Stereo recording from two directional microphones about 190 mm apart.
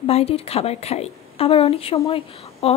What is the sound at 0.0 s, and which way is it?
A woman's voice, 30° left (ahead or behind).